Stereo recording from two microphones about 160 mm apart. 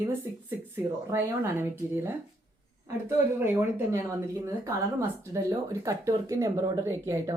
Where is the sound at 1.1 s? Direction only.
15° right (ahead or behind).